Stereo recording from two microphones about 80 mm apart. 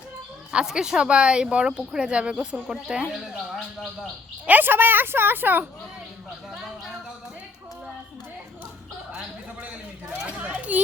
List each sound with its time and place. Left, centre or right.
0.5 s speech: centre
4.4 s a woman's voice: right
6.5 s speech: centre
10.2 s speech: centre